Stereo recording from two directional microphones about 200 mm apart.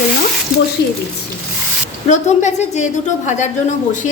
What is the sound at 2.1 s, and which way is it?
Speech, 35° left (ahead or behind).